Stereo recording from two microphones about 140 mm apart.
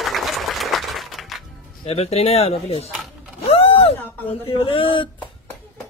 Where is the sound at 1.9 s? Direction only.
45° left (ahead or behind).